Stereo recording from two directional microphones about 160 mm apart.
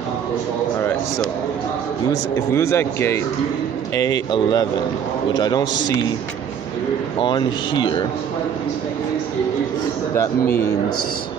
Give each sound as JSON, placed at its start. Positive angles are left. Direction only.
{"t": 2.5, "sound": "speech", "side_deg": 15}
{"t": 7.2, "sound": "speech", "side_deg": 30}